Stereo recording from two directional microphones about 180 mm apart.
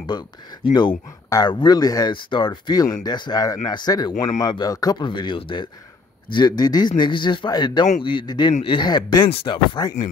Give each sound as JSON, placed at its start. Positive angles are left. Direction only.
{"t": 0.7, "sound": "speech", "side_deg": 25}